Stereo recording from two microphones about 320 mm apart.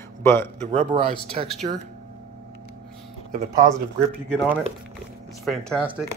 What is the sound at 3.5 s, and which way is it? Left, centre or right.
Speech, centre.